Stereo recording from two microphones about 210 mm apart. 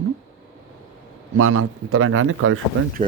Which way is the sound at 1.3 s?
80° right.